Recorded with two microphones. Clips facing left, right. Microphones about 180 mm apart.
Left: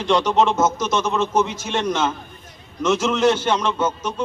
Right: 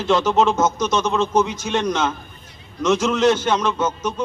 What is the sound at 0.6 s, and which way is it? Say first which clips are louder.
A man's voice: right 1 dB; 5° left (ahead or behind).